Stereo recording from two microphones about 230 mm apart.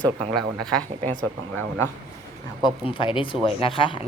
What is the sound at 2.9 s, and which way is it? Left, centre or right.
A woman's voice, left.